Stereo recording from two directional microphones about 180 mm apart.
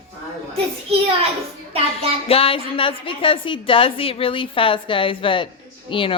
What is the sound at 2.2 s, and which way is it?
Speech, 30° left (ahead or behind).